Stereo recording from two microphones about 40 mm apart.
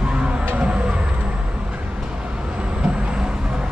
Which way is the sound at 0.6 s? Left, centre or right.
Right.